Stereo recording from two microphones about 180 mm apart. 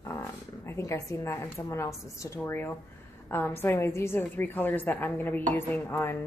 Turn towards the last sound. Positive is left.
turn(degrees=10)  # may be behind; listen again after turning